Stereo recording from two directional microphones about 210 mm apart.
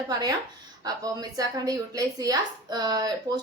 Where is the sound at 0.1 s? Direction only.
20° right (ahead or behind).